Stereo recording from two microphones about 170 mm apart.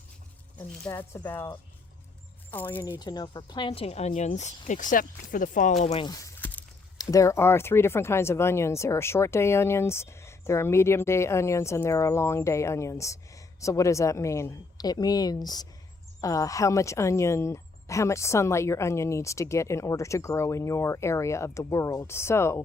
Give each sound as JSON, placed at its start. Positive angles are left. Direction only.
{"t": 0.9, "sound": "speech", "side_deg": 15}
{"t": 2.5, "sound": "speech", "side_deg": 10}
{"t": 3.0, "sound": "speech", "side_deg": 25}
{"t": 6.0, "sound": "a sound", "side_deg": 20}
{"t": 7.0, "sound": "speech", "side_deg": 20}